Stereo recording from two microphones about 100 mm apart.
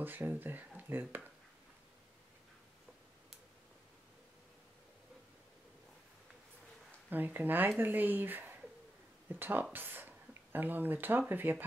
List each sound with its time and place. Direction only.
0.0 s speech: 20° right (ahead or behind)
7.1 s speech: 20° right (ahead or behind)